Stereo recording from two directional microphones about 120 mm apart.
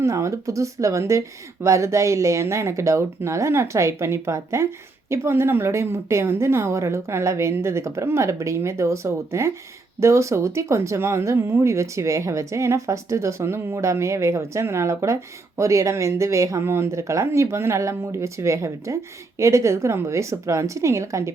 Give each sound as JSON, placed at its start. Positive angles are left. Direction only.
{"t": 0.0, "sound": "speech", "side_deg": -25}